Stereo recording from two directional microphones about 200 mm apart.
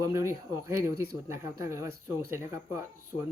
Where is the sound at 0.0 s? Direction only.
15° right (ahead or behind).